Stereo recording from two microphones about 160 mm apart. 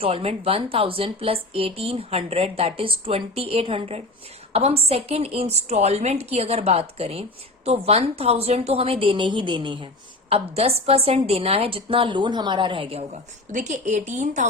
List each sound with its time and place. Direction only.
0.0 s a woman's voice: 35° right (ahead or behind)
13.5 s speech: 50° right (ahead or behind)